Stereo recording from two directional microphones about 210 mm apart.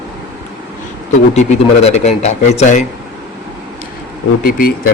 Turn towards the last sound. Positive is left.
turn(degrees=45)  # may be behind; listen again after turning